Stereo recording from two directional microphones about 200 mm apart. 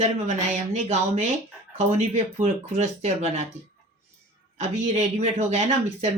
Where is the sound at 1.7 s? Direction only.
35° right (ahead or behind).